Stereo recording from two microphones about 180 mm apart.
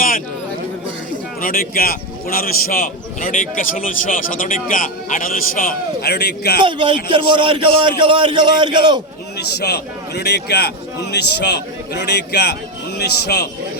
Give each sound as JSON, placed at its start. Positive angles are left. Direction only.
{"t": 1.4, "sound": "a man's voice", "side_deg": 55}
{"t": 6.6, "sound": "a man's voice", "side_deg": -30}
{"t": 9.4, "sound": "a man's voice", "side_deg": 65}